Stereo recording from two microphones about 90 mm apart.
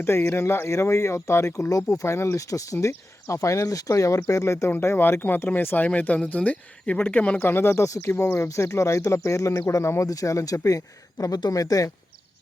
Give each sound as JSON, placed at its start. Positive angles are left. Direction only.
{"t": 0.0, "sound": "speech", "side_deg": 30}